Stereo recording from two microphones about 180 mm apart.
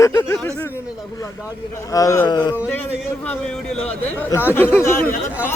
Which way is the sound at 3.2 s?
10° left (ahead or behind).